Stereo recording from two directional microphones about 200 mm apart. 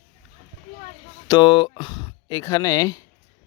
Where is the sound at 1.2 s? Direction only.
20° left (ahead or behind).